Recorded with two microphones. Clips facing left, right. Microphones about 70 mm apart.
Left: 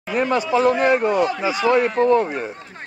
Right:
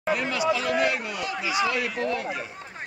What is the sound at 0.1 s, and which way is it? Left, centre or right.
Speech, left.